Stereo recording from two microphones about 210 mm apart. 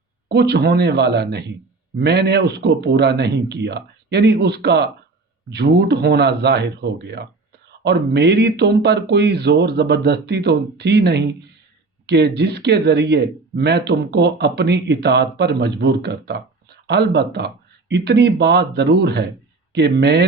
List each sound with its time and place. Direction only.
0.3 s speech: 50° right (ahead or behind)